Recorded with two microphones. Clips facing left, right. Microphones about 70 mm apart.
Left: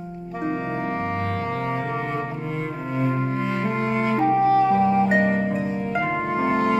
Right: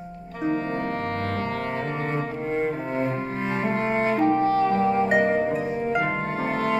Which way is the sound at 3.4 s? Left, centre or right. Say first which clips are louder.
Left 1 dB; right.